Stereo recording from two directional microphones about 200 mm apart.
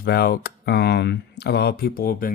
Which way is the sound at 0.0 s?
50° left (ahead or behind).